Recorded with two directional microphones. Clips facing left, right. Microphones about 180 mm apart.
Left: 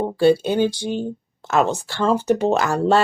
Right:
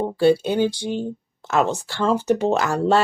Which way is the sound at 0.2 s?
45° left (ahead or behind).